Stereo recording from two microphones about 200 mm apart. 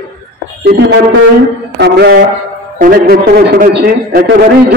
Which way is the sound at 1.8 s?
55° right (ahead or behind).